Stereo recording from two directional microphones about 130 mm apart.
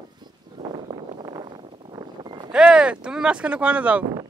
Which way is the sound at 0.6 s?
45° right (ahead or behind).